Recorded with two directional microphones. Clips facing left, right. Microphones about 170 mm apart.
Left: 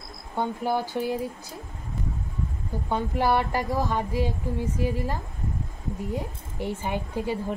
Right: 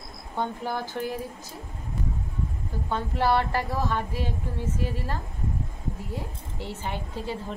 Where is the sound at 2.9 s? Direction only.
15° left (ahead or behind).